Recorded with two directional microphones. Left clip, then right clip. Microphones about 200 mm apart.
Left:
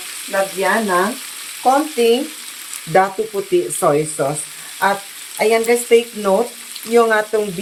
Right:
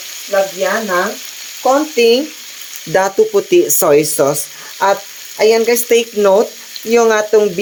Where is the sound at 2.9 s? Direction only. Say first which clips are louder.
Right 4 dB; 55° right (ahead or behind).